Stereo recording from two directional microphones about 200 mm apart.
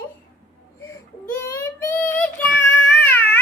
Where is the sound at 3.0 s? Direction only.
10° left (ahead or behind).